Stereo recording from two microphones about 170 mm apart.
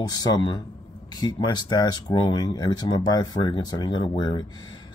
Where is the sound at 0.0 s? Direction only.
25° left (ahead or behind).